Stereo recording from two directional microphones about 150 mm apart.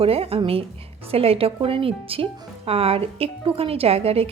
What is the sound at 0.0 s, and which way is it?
A woman's voice, 40° right (ahead or behind).